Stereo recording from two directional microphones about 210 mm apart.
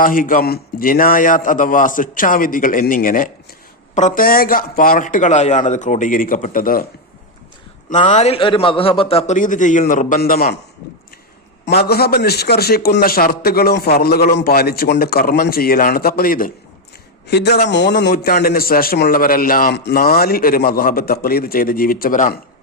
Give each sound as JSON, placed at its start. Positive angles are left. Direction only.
{"t": 0.0, "sound": "a man's voice", "side_deg": 40}
{"t": 7.9, "sound": "a man's voice", "side_deg": 35}
{"t": 11.6, "sound": "a man's voice", "side_deg": 50}